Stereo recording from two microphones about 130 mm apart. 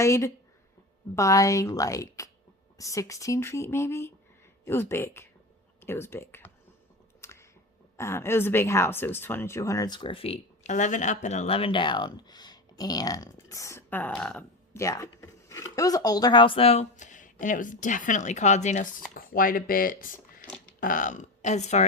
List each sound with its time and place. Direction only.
0.0 s speech: 25° left (ahead or behind)
7.2 s a sound: 20° left (ahead or behind)
7.9 s speech: 20° left (ahead or behind); by 10.4 s 45° left (ahead or behind)
10.6 s speech: 70° left (ahead or behind); by 14.1 s 15° left (ahead or behind)
14.1 s speech: 5° left (ahead or behind)
14.7 s speech: 25° left (ahead or behind); by 21.8 s 60° left (ahead or behind)